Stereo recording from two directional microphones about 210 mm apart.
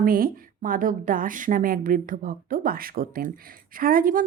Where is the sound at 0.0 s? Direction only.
40° right (ahead or behind).